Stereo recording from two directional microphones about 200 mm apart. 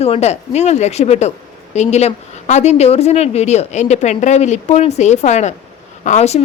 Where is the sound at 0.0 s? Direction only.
30° left (ahead or behind).